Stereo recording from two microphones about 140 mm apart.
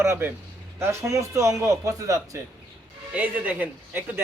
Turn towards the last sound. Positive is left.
turn(degrees=-15)  # may be behind; listen again after turning